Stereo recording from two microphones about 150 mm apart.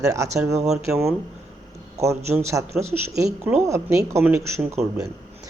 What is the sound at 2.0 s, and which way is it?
Speech, 20° right (ahead or behind).